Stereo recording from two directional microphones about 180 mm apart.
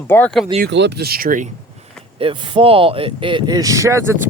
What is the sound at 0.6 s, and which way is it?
Speech, 75° right (ahead or behind).